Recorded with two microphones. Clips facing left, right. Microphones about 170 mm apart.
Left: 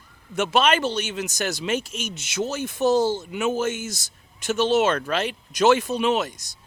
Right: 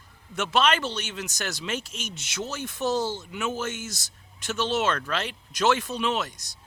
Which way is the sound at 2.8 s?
45° left (ahead or behind).